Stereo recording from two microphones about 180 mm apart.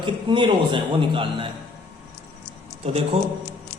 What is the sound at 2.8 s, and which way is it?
Speech, 35° right (ahead or behind).